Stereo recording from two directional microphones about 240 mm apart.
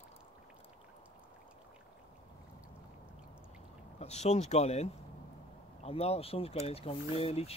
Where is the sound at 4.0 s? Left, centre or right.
Left.